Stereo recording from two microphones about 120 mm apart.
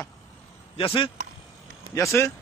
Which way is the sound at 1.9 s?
25° left (ahead or behind).